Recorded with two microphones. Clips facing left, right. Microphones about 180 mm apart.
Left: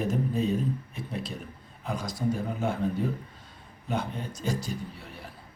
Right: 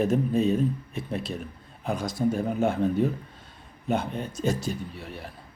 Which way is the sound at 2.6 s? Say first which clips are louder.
Right 5 dB; 65° right (ahead or behind).